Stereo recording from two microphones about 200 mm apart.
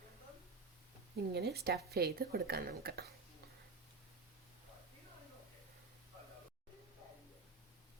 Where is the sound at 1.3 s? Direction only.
55° right (ahead or behind).